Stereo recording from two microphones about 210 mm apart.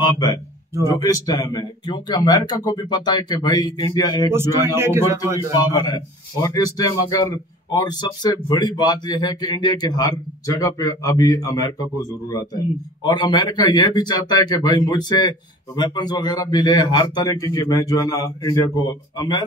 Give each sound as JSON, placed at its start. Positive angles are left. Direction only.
{"t": 0.0, "sound": "a man's voice", "side_deg": 20}
{"t": 4.3, "sound": "a man's voice", "side_deg": -10}
{"t": 5.8, "sound": "a man's voice", "side_deg": 20}